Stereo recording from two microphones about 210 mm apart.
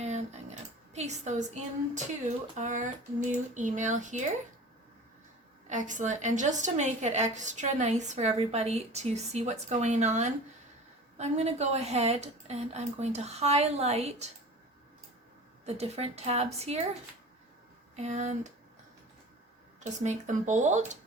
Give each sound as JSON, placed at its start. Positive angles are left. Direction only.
{"t": 0.0, "sound": "a sound", "side_deg": -35}
{"t": 0.9, "sound": "a woman's voice", "side_deg": -35}
{"t": 5.6, "sound": "a woman's voice", "side_deg": -35}
{"t": 15.6, "sound": "a woman's voice", "side_deg": -30}
{"t": 17.9, "sound": "a woman's voice", "side_deg": -30}
{"t": 19.8, "sound": "a woman's voice", "side_deg": -35}